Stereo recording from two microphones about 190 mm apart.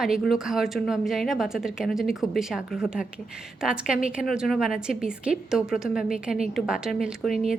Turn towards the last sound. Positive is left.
turn(degrees=0)  # may be behind; listen again after turning